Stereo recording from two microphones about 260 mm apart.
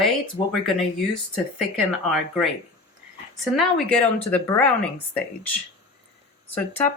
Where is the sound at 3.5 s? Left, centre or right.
Centre.